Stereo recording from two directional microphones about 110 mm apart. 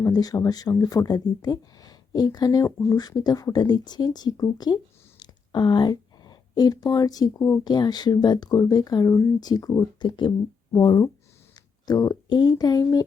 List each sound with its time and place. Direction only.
0.1 s speech: 35° left (ahead or behind)